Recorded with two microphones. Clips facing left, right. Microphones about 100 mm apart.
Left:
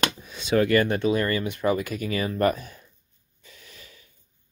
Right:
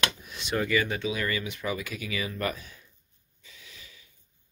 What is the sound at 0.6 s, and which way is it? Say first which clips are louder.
Speech: left 7 dB; 55° left (ahead or behind).